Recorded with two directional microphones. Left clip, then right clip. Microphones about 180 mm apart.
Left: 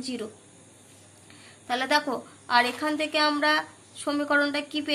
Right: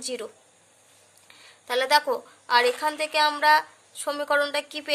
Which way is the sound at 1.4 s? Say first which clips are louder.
Right 3 dB; 40° right (ahead or behind).